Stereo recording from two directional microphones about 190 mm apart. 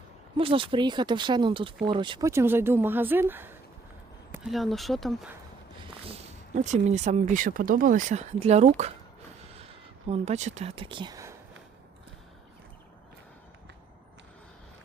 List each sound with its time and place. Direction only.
0.3 s speech: 30° right (ahead or behind); by 5.3 s centre (ahead or behind)
5.8 s speech: 30° right (ahead or behind)